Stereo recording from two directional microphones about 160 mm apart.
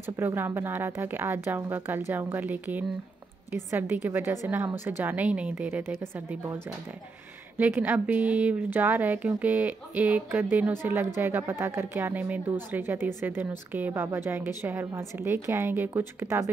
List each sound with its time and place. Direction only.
0.2 s a woman's voice: 15° right (ahead or behind)
7.5 s a woman's voice: 10° right (ahead or behind)